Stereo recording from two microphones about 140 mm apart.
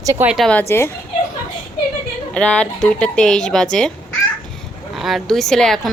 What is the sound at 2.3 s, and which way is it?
A woman's voice, 5° left (ahead or behind).